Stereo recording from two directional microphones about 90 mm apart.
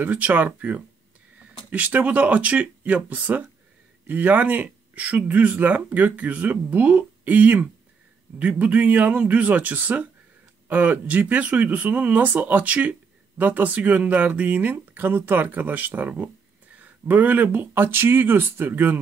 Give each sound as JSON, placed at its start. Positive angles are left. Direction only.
{"t": 0.0, "sound": "speech", "side_deg": -20}